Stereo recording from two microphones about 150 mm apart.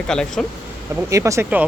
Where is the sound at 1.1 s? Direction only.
20° right (ahead or behind).